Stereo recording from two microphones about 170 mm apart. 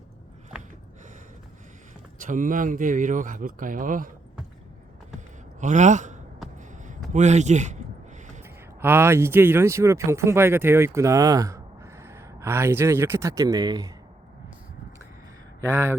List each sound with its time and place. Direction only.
2.2 s speech: 50° right (ahead or behind)
5.5 s a man's voice: 45° right (ahead or behind)
7.1 s a sound: 45° right (ahead or behind)
8.8 s speech: 15° right (ahead or behind)
15.6 s speech: 15° right (ahead or behind)